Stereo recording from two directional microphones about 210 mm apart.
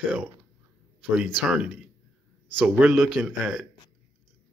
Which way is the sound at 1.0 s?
5° right (ahead or behind).